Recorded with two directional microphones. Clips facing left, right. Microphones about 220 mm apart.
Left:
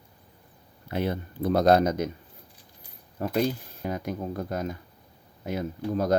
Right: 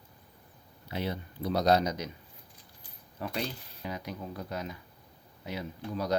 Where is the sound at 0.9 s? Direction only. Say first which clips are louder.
Left 6 dB; 50° left (ahead or behind).